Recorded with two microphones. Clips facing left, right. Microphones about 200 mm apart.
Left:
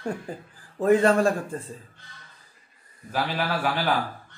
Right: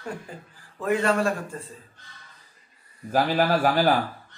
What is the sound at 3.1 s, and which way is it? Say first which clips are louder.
Speech: right 6 dB; 45° right (ahead or behind).